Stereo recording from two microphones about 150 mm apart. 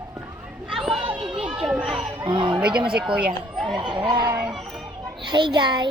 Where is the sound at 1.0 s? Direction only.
35° right (ahead or behind).